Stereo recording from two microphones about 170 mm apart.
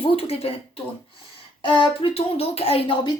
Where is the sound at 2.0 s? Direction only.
35° left (ahead or behind).